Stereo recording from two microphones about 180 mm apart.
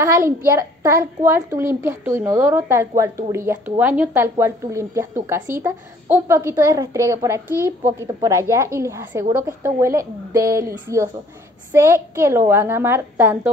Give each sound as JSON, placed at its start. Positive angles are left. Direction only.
{"t": 0.0, "sound": "a child's voice", "side_deg": -15}